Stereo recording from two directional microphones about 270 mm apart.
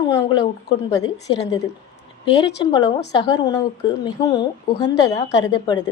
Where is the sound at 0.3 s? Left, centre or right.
Centre.